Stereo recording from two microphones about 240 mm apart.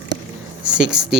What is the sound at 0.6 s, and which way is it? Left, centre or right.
Speech, centre.